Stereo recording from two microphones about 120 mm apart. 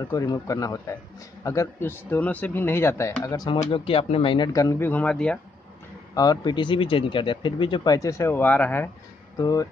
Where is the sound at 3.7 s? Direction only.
50° left (ahead or behind).